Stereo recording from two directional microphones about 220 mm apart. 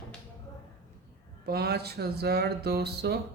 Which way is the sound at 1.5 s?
45° right (ahead or behind).